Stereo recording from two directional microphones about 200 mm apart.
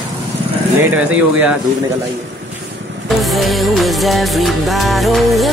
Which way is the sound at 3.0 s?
Centre (ahead or behind).